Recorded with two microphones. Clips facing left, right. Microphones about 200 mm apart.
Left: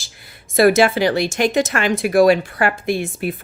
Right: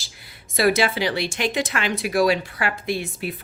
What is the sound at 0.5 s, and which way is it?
Speech, 50° left (ahead or behind).